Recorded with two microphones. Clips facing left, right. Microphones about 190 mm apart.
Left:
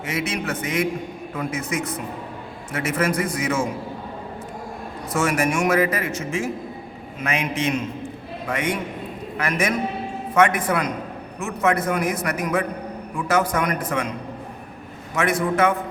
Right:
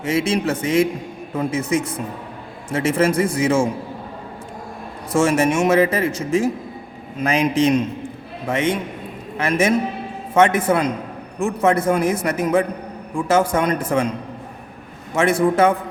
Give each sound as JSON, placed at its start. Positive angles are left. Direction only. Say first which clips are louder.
{"t": 0.0, "sound": "speech", "louder": "right 7 dB", "side_deg": -30}
{"t": 5.1, "sound": "a man's voice", "louder": "right 5 dB", "side_deg": -25}
{"t": 15.1, "sound": "speech", "louder": "right 5 dB", "side_deg": -30}